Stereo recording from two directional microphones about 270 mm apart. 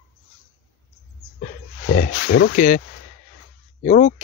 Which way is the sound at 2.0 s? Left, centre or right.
Left.